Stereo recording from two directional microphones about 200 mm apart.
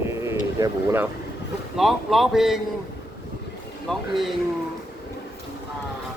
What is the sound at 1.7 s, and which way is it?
Speech, centre (ahead or behind).